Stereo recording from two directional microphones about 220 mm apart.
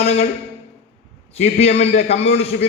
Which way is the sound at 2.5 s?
45° left (ahead or behind).